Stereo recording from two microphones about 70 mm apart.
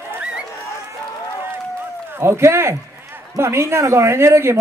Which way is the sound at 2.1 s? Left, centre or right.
Right.